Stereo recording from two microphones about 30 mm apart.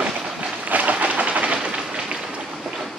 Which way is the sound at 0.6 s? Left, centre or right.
Right.